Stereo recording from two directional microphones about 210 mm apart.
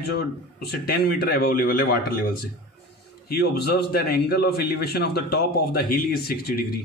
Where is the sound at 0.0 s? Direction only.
50° left (ahead or behind).